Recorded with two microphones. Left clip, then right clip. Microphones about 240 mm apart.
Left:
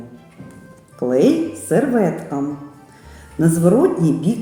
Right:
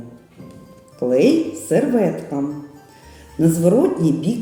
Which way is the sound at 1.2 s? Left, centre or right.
Centre.